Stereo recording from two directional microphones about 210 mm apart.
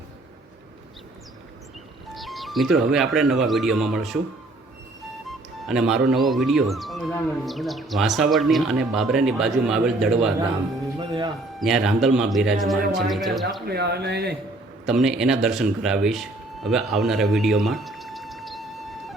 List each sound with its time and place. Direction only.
2.1 s speech: centre (ahead or behind)
5.2 s speech: centre (ahead or behind)
11.0 s a sound: 25° right (ahead or behind)
11.6 s speech: centre (ahead or behind)
13.7 s speech: 50° right (ahead or behind)
14.8 s speech: 5° right (ahead or behind)